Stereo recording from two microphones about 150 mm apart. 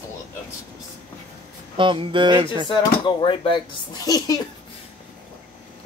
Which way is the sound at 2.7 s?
30° left (ahead or behind).